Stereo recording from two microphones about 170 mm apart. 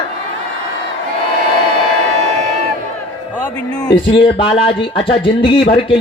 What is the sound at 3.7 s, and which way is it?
A man's voice, 25° left (ahead or behind).